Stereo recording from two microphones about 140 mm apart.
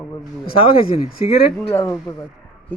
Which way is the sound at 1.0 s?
50° left (ahead or behind).